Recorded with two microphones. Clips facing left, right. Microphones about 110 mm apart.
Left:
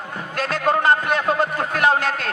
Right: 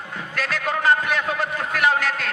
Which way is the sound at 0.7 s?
35° left (ahead or behind).